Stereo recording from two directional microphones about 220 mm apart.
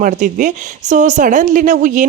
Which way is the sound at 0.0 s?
35° right (ahead or behind).